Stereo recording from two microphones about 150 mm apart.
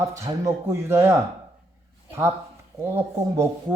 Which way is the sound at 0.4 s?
15° right (ahead or behind).